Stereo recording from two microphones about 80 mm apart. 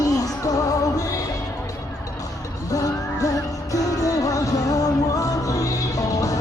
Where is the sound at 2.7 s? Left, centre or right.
Left.